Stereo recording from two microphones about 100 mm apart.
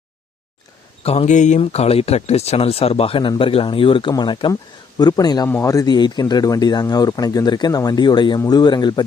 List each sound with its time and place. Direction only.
1.0 s speech: 90° left
3.2 s speech: 55° left (ahead or behind)
4.1 s speech: 50° left (ahead or behind)
5.5 s speech: 30° left (ahead or behind); by 9.0 s 45° left (ahead or behind)